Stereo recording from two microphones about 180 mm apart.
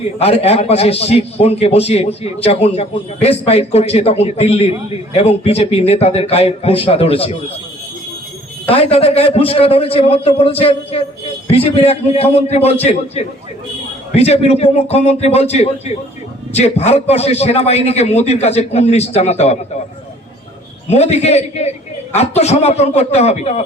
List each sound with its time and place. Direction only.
0.2 s a man's voice: 35° left (ahead or behind)
8.6 s a man's voice: 30° left (ahead or behind)
20.9 s a man's voice: 35° left (ahead or behind)